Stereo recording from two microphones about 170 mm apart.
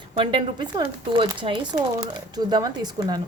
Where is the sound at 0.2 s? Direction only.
30° right (ahead or behind).